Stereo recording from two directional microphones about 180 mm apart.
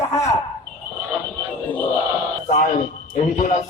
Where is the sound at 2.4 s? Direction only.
40° left (ahead or behind).